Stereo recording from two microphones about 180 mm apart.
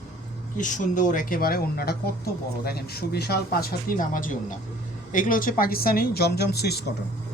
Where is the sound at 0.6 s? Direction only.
45° left (ahead or behind); by 6.8 s 65° left (ahead or behind).